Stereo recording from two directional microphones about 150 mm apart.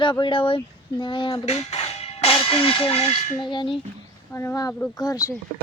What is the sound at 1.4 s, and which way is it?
Speech, 45° left (ahead or behind).